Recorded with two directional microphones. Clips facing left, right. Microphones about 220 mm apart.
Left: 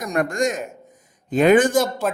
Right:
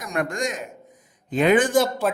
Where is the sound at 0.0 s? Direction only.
40° left (ahead or behind).